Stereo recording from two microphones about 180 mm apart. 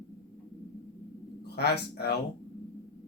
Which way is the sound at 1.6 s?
65° left (ahead or behind).